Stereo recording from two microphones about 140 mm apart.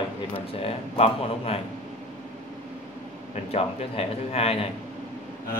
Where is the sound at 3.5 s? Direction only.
45° left (ahead or behind).